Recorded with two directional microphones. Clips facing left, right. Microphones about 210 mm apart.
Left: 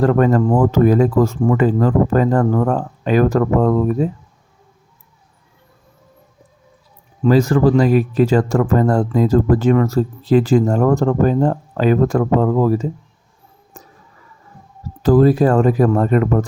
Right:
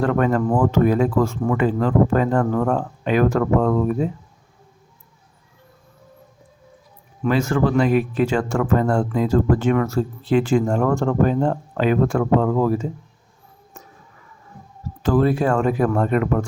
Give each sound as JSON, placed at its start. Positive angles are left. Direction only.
{"t": 0.0, "sound": "speech", "side_deg": 35}
{"t": 7.3, "sound": "speech", "side_deg": 35}
{"t": 13.7, "sound": "a sound", "side_deg": 35}
{"t": 15.0, "sound": "speech", "side_deg": 35}